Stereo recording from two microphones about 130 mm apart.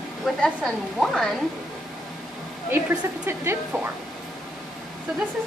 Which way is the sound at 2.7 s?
15° right (ahead or behind).